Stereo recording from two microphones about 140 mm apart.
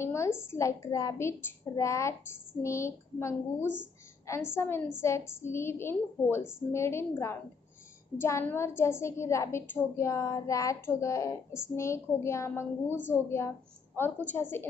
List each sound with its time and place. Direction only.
0.0 s a woman's voice: 20° left (ahead or behind)